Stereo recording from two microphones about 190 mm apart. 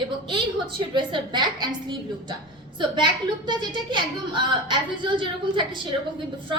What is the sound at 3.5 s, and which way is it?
A woman's voice, 25° right (ahead or behind).